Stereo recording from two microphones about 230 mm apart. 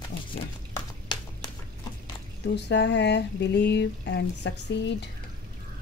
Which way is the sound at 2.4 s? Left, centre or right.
Left.